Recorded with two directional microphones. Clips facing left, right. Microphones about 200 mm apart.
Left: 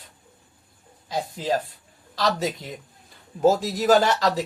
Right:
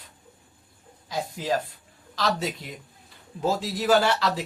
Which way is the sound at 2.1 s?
40° left (ahead or behind).